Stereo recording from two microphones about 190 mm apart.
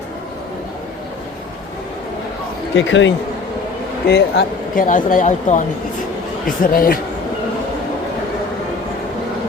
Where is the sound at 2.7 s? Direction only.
75° left (ahead or behind).